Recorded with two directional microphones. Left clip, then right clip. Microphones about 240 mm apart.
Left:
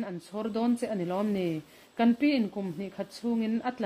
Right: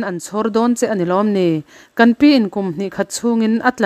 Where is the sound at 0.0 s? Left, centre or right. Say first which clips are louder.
Right 15 dB; right.